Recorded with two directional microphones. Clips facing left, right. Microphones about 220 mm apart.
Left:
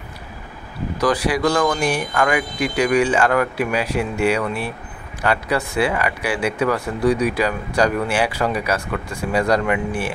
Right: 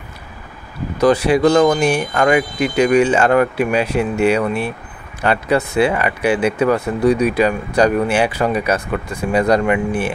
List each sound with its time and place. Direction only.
0.9 s speech: 25° right (ahead or behind)